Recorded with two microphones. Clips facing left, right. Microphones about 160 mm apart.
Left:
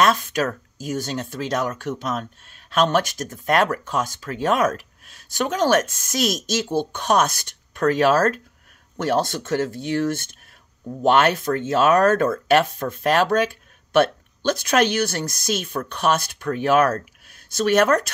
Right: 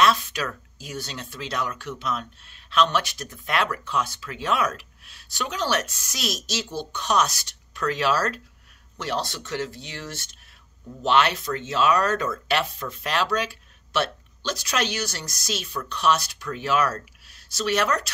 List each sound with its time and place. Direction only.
0.0 s speech: 45° left (ahead or behind)